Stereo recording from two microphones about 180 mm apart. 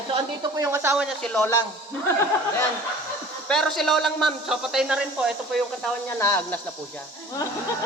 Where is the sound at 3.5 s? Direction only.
Centre (ahead or behind).